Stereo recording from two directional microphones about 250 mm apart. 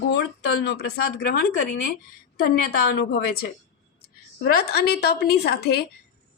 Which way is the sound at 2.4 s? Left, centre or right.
Left.